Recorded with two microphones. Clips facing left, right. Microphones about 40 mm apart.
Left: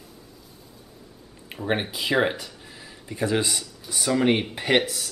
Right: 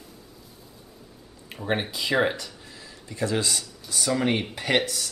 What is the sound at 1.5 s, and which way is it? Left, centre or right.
Speech, centre.